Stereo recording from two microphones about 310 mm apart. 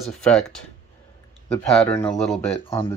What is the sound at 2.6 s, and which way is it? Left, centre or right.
Speech, centre.